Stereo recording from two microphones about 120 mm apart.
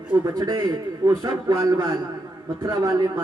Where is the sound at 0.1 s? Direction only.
35° right (ahead or behind).